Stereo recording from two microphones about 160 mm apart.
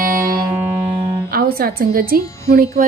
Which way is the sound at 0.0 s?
60° right (ahead or behind).